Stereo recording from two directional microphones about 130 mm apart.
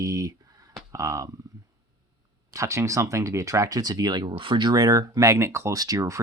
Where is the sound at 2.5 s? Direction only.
25° right (ahead or behind).